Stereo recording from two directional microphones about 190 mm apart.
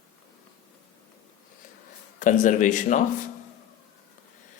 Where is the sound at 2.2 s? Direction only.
40° left (ahead or behind).